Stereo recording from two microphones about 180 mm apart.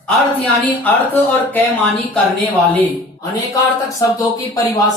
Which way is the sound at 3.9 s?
20° left (ahead or behind).